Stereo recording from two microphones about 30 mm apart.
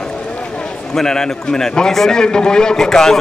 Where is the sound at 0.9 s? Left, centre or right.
Centre.